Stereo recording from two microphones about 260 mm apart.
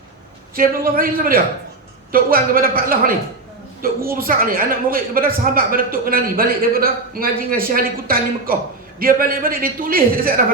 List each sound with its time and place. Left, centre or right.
0.5 s a woman's voice: right